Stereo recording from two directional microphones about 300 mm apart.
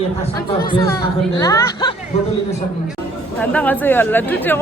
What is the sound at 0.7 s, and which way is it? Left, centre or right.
Speech, centre.